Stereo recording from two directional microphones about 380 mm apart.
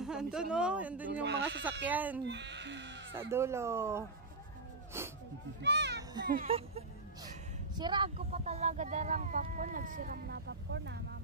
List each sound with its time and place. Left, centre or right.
0.0 s speech: centre
1.2 s speech: right
1.9 s speech: centre
2.2 s speech: right
3.2 s speech: centre
5.6 s speech: right